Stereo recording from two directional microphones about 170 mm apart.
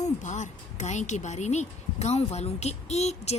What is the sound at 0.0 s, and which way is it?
A woman's voice, 45° left (ahead or behind).